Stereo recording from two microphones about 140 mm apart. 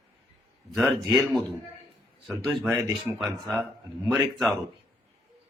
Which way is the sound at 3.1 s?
15° right (ahead or behind).